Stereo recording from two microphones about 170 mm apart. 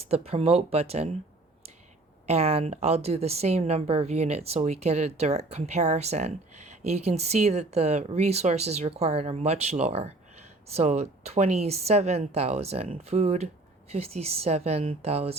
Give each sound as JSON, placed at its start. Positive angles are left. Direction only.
{"t": 0.0, "sound": "speech", "side_deg": -35}
{"t": 2.2, "sound": "speech", "side_deg": -40}